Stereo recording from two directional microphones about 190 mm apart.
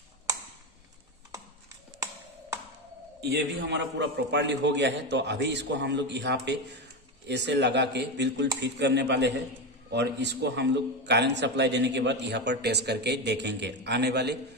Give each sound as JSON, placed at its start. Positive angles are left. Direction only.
{"t": 3.2, "sound": "a man's voice", "side_deg": -60}